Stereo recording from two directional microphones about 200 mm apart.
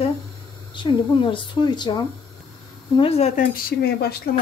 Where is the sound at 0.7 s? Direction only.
25° left (ahead or behind).